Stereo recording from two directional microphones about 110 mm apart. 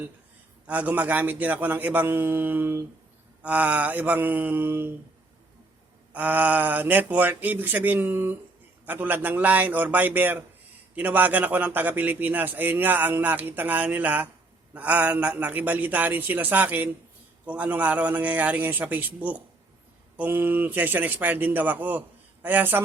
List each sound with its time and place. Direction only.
0.7 s speech: 15° right (ahead or behind)
6.1 s speech: 15° right (ahead or behind)